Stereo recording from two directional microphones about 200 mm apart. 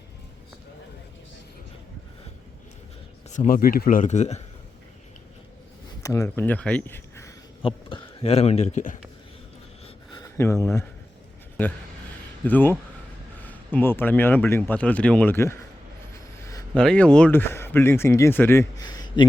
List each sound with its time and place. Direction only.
3.2 s speech: 40° left (ahead or behind)
6.0 s speech: 15° left (ahead or behind)
7.6 s speech: 25° left (ahead or behind)
9.8 s a sound: 25° left (ahead or behind)
10.3 s speech: 10° left (ahead or behind)
12.5 s speech: 10° left (ahead or behind)
16.7 s speech: 5° left (ahead or behind); by 19.3 s 20° left (ahead or behind)